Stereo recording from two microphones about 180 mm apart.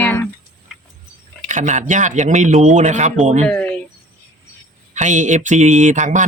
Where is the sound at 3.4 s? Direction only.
10° left (ahead or behind).